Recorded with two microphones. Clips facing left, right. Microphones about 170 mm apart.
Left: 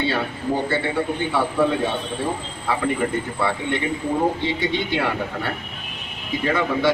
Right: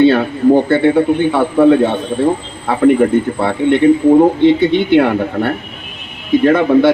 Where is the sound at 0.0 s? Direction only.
60° right (ahead or behind).